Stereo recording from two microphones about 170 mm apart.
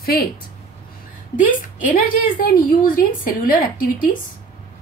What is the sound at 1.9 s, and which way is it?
A woman's voice, 55° left (ahead or behind).